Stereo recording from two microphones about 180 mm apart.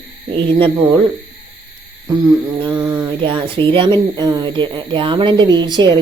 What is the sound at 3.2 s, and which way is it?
A woman's voice, 25° right (ahead or behind).